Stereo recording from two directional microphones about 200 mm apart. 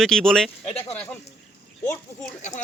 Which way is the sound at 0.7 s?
30° left (ahead or behind).